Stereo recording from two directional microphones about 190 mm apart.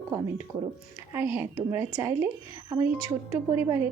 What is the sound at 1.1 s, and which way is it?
Speech, 15° right (ahead or behind).